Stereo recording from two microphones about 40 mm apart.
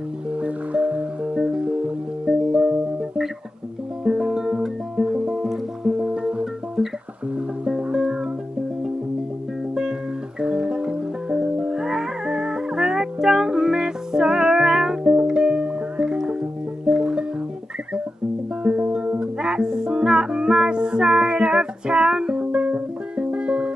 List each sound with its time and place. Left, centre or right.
0.3 s music: right
1.3 s music: right
6.1 s music: right
6.8 s music: centre
10.4 s music: centre
18.6 s music: right
22.4 s music: right